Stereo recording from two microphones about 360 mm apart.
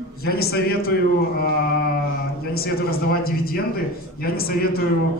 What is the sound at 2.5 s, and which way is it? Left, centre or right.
A man's voice, left.